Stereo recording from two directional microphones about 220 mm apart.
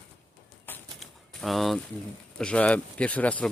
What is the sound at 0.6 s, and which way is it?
Typewriter, 5° left (ahead or behind).